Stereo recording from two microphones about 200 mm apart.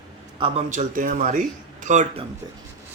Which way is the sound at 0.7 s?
40° right (ahead or behind).